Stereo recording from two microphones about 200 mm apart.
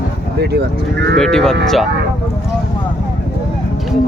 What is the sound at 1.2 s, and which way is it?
Speech, 5° left (ahead or behind).